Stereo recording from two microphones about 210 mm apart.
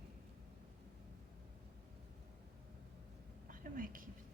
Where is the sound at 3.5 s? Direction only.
40° right (ahead or behind).